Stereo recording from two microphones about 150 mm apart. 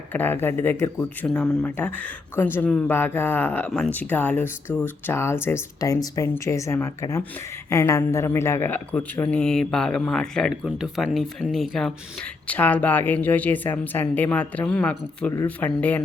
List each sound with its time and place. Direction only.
0.1 s a man's voice: 10° left (ahead or behind)